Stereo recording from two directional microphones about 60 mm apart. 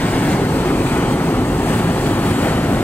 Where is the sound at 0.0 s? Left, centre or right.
Left.